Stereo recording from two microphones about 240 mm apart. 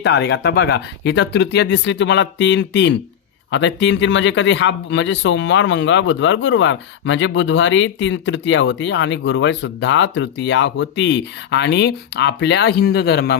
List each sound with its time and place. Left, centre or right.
0.0 s speech: left